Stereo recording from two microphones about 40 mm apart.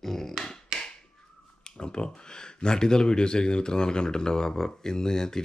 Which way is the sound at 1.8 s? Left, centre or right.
Left.